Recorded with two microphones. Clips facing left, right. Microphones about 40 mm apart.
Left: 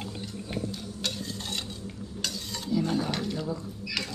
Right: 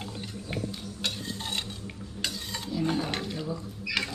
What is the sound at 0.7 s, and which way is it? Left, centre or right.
Stir, centre.